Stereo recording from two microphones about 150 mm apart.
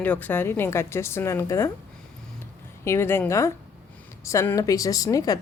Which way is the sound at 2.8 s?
15° left (ahead or behind).